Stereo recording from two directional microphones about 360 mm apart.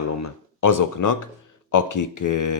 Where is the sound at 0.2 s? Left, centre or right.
Left.